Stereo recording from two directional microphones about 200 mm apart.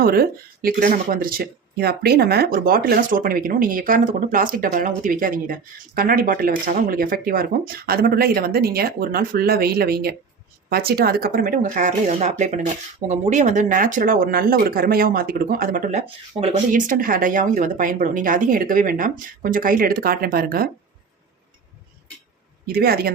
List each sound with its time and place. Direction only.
0.0 s speech: 50° right (ahead or behind)
22.6 s speech: 50° right (ahead or behind)